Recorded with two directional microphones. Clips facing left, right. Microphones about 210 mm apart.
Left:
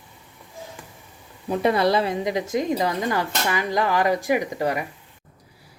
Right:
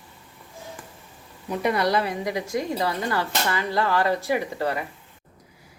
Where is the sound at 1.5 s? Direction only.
30° left (ahead or behind).